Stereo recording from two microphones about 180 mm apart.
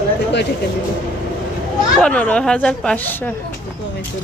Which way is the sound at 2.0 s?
5° left (ahead or behind).